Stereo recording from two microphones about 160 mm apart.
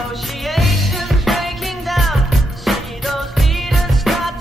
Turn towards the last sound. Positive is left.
turn(degrees=0)  # may be behind; listen again after turning